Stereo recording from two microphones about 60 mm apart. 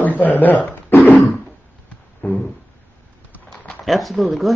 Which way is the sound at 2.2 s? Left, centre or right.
Left.